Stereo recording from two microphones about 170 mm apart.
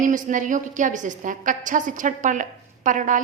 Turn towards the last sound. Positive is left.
turn(degrees=-50)  # may be behind; listen again after turning